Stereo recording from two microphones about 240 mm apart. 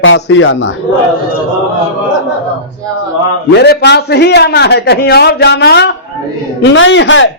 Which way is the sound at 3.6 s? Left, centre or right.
Left.